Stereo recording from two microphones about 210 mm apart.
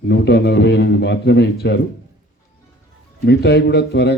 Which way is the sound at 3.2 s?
55° left (ahead or behind).